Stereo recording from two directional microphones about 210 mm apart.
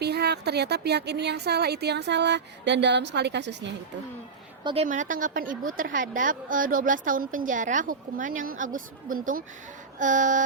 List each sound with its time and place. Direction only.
0.0 s speech: 50° right (ahead or behind)
4.6 s a woman's voice: 30° right (ahead or behind)